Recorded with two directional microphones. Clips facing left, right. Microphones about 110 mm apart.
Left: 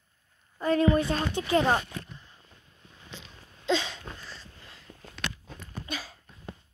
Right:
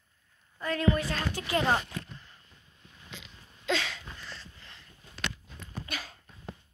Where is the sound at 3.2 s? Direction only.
25° left (ahead or behind).